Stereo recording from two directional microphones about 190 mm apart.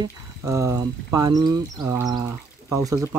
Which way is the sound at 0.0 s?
15° right (ahead or behind).